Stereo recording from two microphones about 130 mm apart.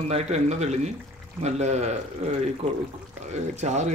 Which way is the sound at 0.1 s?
55° right (ahead or behind).